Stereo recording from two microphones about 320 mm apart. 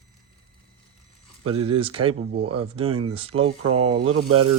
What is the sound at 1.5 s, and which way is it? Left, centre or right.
Speech, centre.